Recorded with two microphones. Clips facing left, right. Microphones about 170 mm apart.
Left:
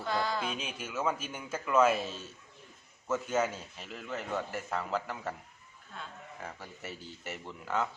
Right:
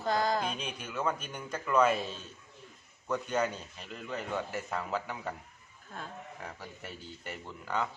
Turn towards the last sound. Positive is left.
turn(degrees=0)  # may be behind; listen again after turning